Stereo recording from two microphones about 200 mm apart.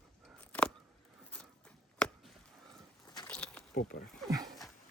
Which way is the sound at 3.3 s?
5° left (ahead or behind).